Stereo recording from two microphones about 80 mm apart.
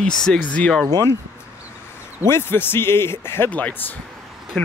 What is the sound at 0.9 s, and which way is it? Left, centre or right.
Speech, right.